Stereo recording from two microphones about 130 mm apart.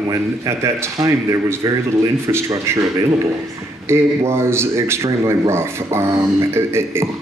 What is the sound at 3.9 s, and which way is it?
Speech, 20° right (ahead or behind).